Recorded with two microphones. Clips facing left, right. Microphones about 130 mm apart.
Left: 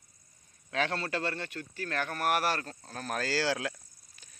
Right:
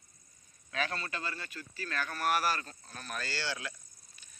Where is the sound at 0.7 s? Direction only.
70° left (ahead or behind).